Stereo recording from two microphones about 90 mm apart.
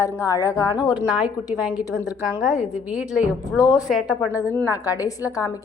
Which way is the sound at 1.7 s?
35° left (ahead or behind).